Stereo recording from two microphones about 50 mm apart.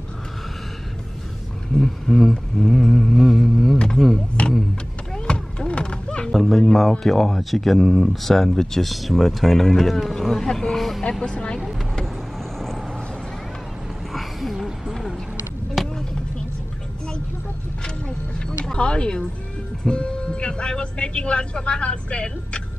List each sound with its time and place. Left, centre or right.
1.8 s mantra: centre
3.7 s a sound: centre
4.4 s vehicle: left
5.1 s a sound: centre
6.3 s music: centre
6.6 s speech: centre
10.8 s music: centre
11.2 s speech: left
12.5 s vehicle: centre
14.1 s a sound: centre
18.7 s speech: left